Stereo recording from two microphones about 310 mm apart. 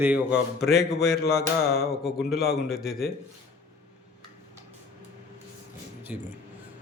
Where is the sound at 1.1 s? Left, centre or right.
Left.